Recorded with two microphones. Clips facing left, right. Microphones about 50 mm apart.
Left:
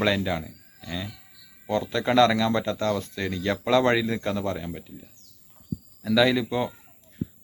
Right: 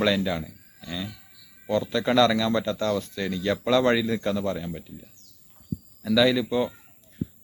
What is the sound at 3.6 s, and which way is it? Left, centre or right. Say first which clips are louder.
Speech: left 1 dB; left.